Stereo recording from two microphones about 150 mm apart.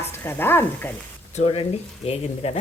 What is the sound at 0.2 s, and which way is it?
Stir, 15° left (ahead or behind).